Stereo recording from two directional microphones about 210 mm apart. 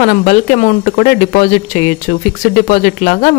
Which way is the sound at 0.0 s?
40° left (ahead or behind).